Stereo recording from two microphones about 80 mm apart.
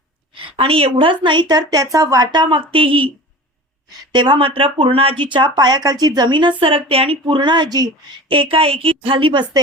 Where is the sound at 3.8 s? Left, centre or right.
Right.